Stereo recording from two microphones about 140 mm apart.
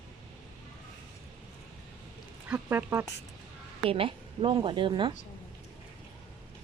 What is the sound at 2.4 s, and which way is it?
Speech, 10° right (ahead or behind).